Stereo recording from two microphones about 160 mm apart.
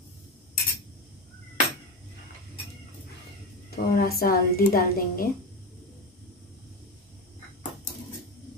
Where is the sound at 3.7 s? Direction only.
65° left (ahead or behind).